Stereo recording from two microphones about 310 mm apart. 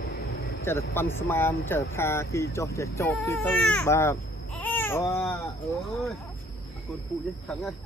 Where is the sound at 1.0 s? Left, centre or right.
Centre.